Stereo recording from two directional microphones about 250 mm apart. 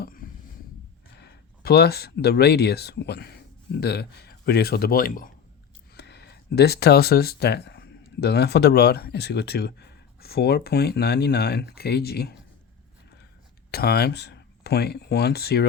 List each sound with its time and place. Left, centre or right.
1.2 s speech: left
13.7 s speech: left